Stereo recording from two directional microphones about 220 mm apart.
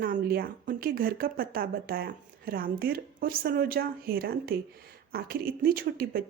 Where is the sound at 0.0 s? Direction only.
45° right (ahead or behind).